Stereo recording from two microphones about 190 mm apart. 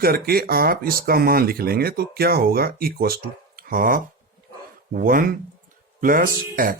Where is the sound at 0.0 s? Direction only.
55° right (ahead or behind).